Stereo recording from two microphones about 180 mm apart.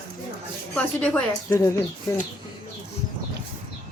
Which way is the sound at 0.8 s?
10° left (ahead or behind).